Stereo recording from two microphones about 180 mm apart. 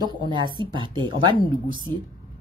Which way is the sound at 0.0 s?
25° right (ahead or behind).